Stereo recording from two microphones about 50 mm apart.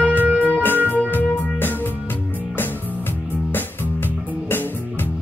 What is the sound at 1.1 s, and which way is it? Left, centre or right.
Music, left.